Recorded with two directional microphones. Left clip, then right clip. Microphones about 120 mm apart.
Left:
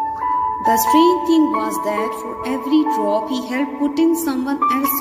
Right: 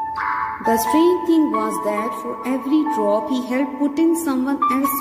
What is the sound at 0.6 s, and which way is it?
Music, 20° right (ahead or behind).